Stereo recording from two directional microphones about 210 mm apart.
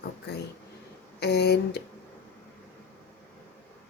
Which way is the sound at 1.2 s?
50° left (ahead or behind).